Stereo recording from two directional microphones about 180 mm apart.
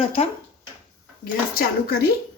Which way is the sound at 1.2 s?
55° left (ahead or behind).